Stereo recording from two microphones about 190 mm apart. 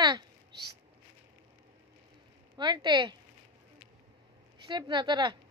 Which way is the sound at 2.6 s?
25° right (ahead or behind).